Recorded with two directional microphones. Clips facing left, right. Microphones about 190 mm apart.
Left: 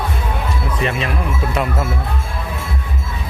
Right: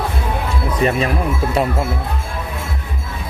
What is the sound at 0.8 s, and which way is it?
Speech, 40° right (ahead or behind).